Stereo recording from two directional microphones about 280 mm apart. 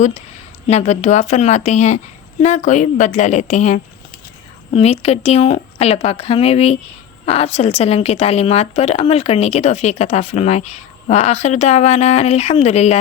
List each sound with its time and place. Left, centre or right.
0.7 s a woman's voice: left